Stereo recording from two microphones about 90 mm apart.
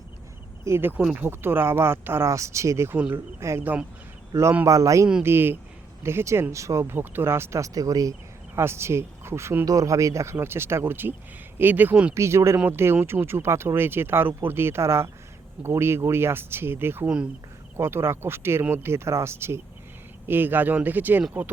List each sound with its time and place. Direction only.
0.6 s speech: 25° right (ahead or behind)
3.6 s speech: 20° right (ahead or behind)
4.6 s speech: 40° right (ahead or behind)
5.2 s speech: 25° right (ahead or behind); by 8.1 s 40° right (ahead or behind)
8.5 s speech: 30° right (ahead or behind)
9.6 s speech: 40° right (ahead or behind); by 12.1 s 15° right (ahead or behind)
12.1 s speech: 30° right (ahead or behind)